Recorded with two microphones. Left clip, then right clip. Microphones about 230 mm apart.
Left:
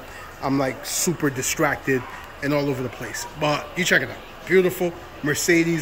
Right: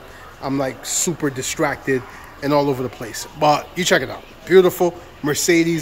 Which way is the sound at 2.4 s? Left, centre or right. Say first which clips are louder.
Right 5 dB; centre.